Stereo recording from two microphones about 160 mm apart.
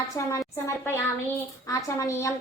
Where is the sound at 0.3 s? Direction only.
20° left (ahead or behind).